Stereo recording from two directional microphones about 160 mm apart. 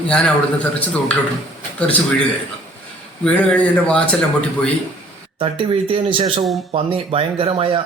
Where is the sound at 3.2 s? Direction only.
5° left (ahead or behind).